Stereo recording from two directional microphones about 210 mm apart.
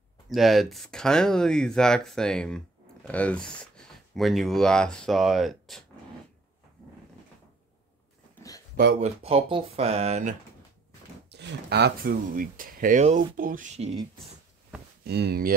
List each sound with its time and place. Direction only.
0.3 s speech: centre (ahead or behind)
8.4 s a sound: 15° left (ahead or behind)
9.0 s speech: 30° right (ahead or behind)
11.2 s speech: 55° right (ahead or behind); by 14.0 s 30° right (ahead or behind)
15.0 s speech: 50° right (ahead or behind)